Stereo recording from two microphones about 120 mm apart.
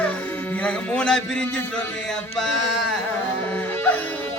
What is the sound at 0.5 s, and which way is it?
A man's voice, 10° left (ahead or behind).